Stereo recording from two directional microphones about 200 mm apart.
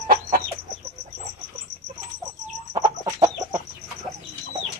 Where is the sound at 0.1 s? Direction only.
45° right (ahead or behind).